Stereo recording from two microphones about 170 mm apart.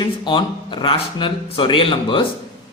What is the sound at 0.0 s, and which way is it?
A man's voice, 30° left (ahead or behind).